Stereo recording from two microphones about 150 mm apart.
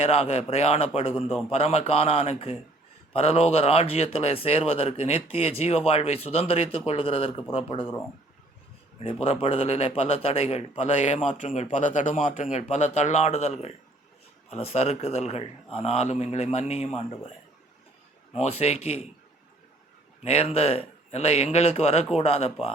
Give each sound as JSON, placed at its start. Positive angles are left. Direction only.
{"t": 0.0, "sound": "speech", "side_deg": 45}
{"t": 9.2, "sound": "speech", "side_deg": 40}
{"t": 18.3, "sound": "speech", "side_deg": 45}
{"t": 20.2, "sound": "speech", "side_deg": 40}